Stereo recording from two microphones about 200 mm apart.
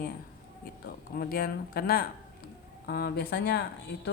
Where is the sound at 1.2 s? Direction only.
50° left (ahead or behind).